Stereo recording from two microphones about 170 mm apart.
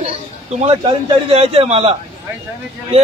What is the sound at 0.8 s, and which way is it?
A man's voice, 35° right (ahead or behind).